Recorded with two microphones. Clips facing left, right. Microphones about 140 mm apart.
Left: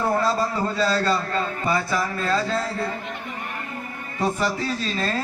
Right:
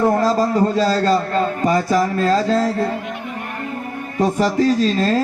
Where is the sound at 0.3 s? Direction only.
35° right (ahead or behind).